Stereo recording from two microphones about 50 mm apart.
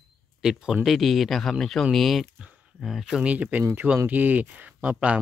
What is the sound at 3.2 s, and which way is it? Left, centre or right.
Speech, right.